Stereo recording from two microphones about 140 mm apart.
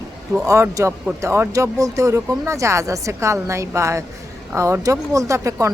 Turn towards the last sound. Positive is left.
turn(degrees=-20)  # may be behind; listen again after turning